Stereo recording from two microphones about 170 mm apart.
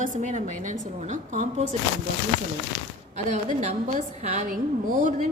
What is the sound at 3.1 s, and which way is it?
A woman's voice, 45° right (ahead or behind).